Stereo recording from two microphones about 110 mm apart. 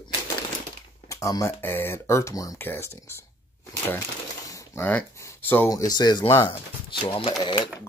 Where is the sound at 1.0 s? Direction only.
30° left (ahead or behind).